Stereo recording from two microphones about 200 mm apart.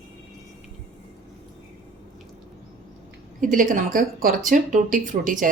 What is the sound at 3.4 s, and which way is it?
Speech, 40° right (ahead or behind).